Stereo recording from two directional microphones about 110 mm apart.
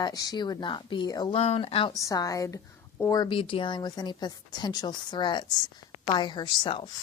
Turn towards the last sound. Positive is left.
turn(degrees=45)  # may be behind; listen again after turning